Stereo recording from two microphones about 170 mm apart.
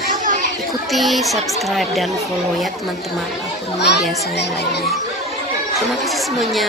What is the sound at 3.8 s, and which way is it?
Speech, 80° left.